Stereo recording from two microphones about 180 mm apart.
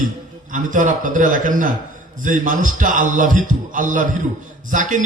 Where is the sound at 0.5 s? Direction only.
45° right (ahead or behind).